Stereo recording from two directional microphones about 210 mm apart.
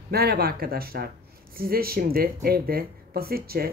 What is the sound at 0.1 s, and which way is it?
Speech, 50° right (ahead or behind).